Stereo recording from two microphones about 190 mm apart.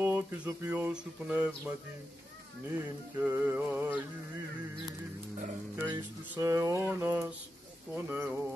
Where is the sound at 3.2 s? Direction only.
10° right (ahead or behind).